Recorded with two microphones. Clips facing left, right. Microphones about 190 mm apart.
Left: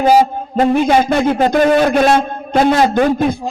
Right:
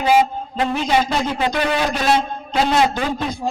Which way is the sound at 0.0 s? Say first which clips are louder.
Left 5 dB; 45° left (ahead or behind).